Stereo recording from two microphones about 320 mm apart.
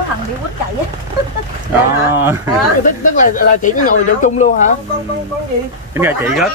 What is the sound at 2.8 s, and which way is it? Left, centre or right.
Speech, left.